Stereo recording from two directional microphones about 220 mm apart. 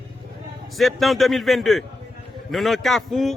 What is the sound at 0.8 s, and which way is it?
A man's voice, centre (ahead or behind).